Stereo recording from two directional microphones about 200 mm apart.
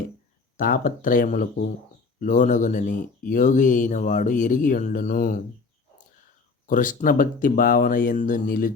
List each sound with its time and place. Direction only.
0.5 s speech: 45° left (ahead or behind)
6.7 s speech: 40° left (ahead or behind)